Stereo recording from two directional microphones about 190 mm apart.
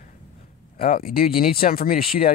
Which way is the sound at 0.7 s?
50° left (ahead or behind).